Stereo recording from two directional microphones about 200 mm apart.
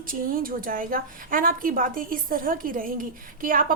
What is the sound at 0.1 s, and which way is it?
Speech, 45° right (ahead or behind).